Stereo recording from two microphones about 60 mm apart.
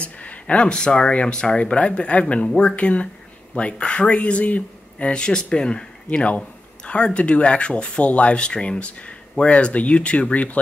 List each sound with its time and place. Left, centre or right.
0.0 s speech: left